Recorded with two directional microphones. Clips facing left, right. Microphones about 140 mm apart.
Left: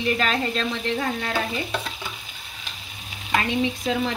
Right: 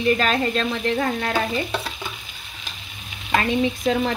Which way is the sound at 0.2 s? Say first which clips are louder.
Right 3 dB; 45° right (ahead or behind).